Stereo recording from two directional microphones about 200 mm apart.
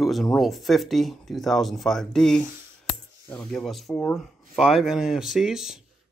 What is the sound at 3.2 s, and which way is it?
Speech, 15° left (ahead or behind).